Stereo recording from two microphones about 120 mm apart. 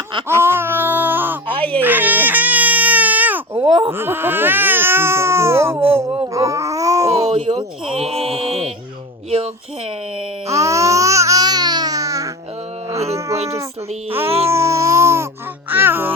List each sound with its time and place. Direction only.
0.3 s baby cry: 20° right (ahead or behind)
3.6 s a sound: 45° right (ahead or behind)
3.9 s speech: 20° right (ahead or behind)
6.2 s babbling: 25° right (ahead or behind)
7.2 s speech: 65° right (ahead or behind)
7.9 s a sound: 55° right (ahead or behind)
10.5 s babbling: 25° right (ahead or behind)
12.9 s a sound: 25° right (ahead or behind)
14.1 s speech: 20° right (ahead or behind)